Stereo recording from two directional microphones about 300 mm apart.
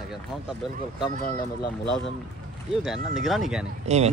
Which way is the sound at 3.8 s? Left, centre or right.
Right.